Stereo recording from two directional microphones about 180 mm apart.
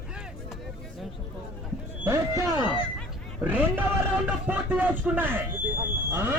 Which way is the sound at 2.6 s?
25° left (ahead or behind).